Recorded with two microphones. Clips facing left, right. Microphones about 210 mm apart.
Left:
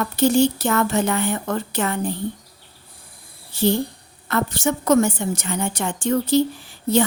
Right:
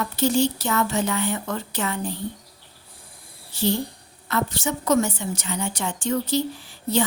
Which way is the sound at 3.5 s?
55° left (ahead or behind).